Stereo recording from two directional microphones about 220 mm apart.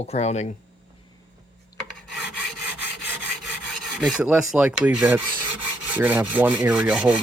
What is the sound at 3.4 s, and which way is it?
Rub, centre (ahead or behind).